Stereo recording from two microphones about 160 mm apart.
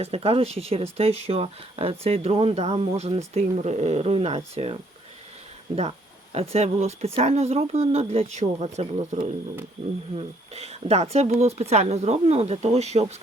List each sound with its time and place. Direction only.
0.0 s speech: 40° right (ahead or behind)
6.3 s speech: 40° right (ahead or behind)
10.2 s speech: 40° right (ahead or behind)